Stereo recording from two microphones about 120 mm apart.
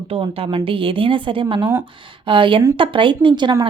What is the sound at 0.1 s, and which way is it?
A woman's voice, 50° right (ahead or behind).